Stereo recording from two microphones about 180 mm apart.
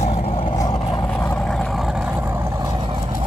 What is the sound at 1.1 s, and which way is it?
Vehicle, 5° left (ahead or behind).